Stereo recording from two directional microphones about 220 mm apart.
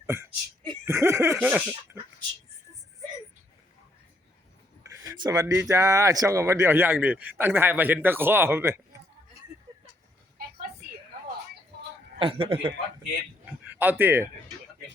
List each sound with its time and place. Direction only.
0.0 s speech: 10° right (ahead or behind)
5.0 s speech: 15° right (ahead or behind)
12.2 s a man's voice: 25° right (ahead or behind)
13.7 s a man's voice: 10° right (ahead or behind)